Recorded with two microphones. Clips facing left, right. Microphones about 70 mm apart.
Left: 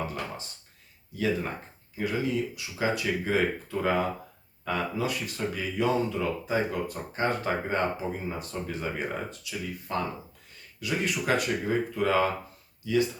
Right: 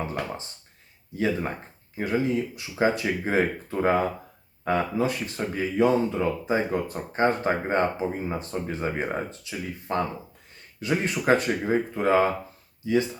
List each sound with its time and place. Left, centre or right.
1.1 s speech: right